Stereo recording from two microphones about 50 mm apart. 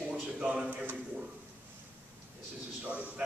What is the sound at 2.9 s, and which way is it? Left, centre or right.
Speech, right.